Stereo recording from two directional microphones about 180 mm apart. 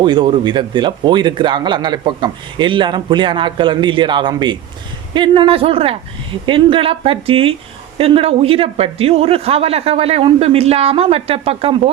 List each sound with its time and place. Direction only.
0.0 s speech: 25° right (ahead or behind)